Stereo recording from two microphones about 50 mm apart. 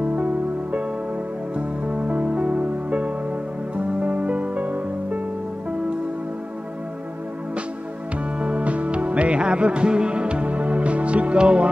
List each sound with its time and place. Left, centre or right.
0.0 s music: right
8.4 s music: right